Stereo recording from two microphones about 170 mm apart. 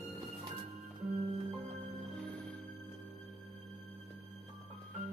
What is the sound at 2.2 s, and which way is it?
Music, 10° left (ahead or behind).